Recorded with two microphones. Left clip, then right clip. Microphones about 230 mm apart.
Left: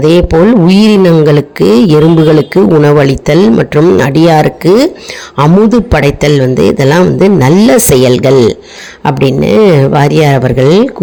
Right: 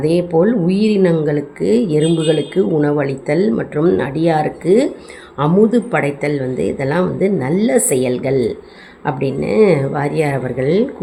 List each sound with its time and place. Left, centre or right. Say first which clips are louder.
0.0 s a man's voice: left 8 dB; left